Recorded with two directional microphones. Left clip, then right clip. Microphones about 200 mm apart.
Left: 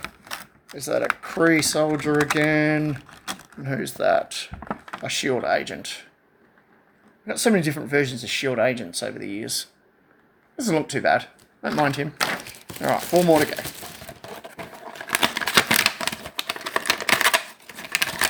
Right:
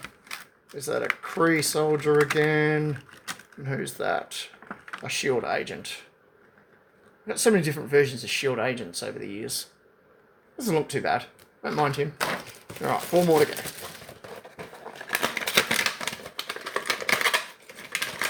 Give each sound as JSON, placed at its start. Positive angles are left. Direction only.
{"t": 0.7, "sound": "speech", "side_deg": 30}
{"t": 7.3, "sound": "speech", "side_deg": 30}
{"t": 15.0, "sound": "typewriter", "side_deg": 50}